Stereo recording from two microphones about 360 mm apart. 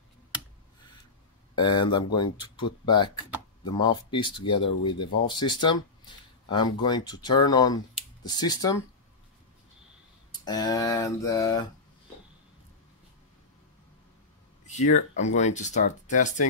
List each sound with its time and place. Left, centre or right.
1.5 s speech: centre
10.3 s speech: centre
14.8 s speech: centre